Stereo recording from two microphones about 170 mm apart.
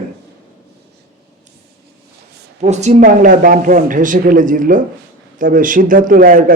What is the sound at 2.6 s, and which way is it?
A man's voice, 40° right (ahead or behind).